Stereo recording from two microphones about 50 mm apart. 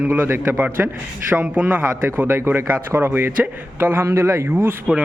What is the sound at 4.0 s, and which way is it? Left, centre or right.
Speech, right.